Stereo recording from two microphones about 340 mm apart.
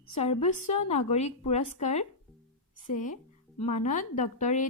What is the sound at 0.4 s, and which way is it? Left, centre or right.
Speech, centre.